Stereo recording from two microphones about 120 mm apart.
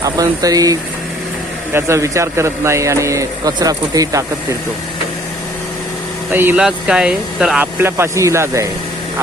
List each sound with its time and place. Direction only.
0.0 s speech: 30° right (ahead or behind)
6.3 s speech: 15° right (ahead or behind)
6.6 s speech: 5° right (ahead or behind)
7.6 s speech: 20° right (ahead or behind)